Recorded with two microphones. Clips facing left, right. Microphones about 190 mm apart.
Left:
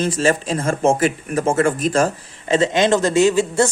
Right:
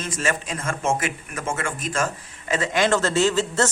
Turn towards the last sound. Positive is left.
turn(degrees=15)  # may be behind; listen again after turning